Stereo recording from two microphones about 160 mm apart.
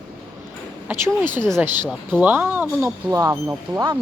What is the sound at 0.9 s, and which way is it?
Speech, 10° right (ahead or behind).